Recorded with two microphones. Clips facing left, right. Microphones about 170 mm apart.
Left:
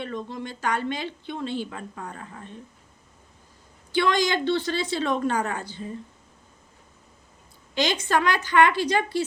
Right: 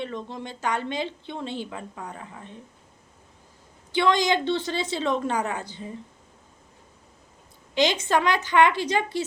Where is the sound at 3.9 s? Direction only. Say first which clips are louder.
Right 1 dB; 20° right (ahead or behind).